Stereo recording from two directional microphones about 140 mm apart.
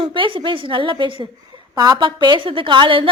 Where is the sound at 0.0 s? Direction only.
35° right (ahead or behind).